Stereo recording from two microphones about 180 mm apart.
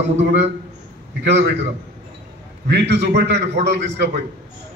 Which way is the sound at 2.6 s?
70° right (ahead or behind).